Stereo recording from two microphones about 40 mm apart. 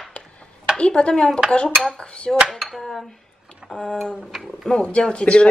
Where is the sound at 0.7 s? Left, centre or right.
Left.